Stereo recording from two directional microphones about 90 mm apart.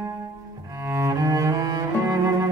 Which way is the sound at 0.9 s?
35° right (ahead or behind).